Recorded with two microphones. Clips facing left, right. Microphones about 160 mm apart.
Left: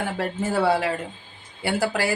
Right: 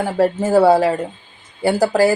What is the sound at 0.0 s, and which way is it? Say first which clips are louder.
Speech: right 9 dB; 40° right (ahead or behind).